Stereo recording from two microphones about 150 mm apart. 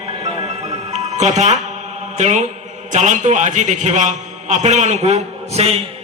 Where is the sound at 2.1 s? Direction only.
50° right (ahead or behind).